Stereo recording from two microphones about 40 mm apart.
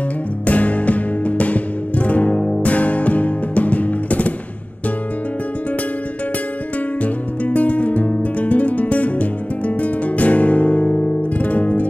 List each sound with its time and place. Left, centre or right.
0.5 s music: left
7.0 s music: left